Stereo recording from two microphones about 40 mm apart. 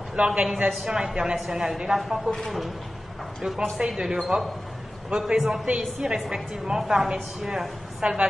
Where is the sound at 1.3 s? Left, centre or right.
Centre.